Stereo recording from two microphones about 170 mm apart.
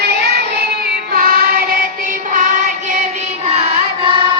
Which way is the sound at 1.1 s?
60° right (ahead or behind).